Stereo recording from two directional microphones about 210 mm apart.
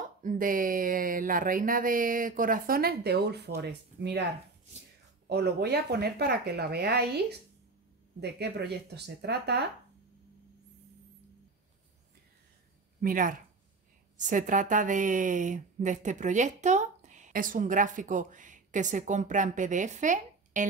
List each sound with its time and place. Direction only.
0.2 s a woman's voice: 40° right (ahead or behind)
5.3 s speech: 50° right (ahead or behind)
13.0 s a woman's voice: 40° right (ahead or behind)